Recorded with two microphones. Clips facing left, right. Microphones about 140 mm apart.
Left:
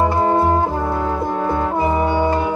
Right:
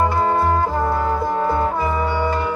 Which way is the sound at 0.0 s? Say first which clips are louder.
Left 2 dB; 20° left (ahead or behind).